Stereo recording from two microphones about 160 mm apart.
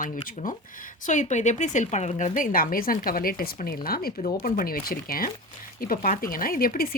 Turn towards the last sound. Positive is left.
turn(degrees=65)  # may be behind; listen again after turning